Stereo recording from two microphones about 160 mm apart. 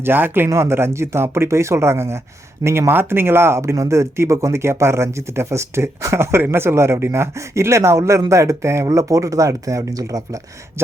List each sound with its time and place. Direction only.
0.0 s speech: 15° right (ahead or behind)